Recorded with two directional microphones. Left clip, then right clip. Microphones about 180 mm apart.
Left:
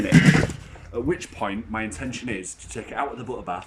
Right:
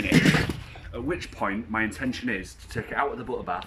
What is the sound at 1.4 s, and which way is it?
Speech, 5° left (ahead or behind).